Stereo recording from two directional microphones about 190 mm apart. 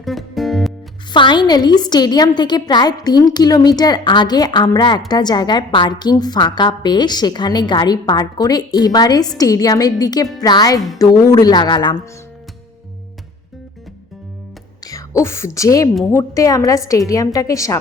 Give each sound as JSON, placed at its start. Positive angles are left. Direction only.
{"t": 0.0, "sound": "music", "side_deg": 0}
{"t": 1.1, "sound": "a woman's voice", "side_deg": 25}
{"t": 14.8, "sound": "a woman's voice", "side_deg": 15}